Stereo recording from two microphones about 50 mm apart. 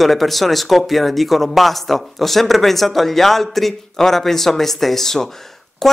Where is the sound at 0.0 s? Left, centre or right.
Centre.